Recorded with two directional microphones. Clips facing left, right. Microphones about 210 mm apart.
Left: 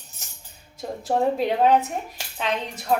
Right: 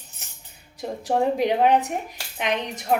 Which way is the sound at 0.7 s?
15° right (ahead or behind).